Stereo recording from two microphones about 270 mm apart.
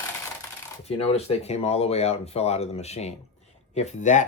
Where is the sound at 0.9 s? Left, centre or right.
Left.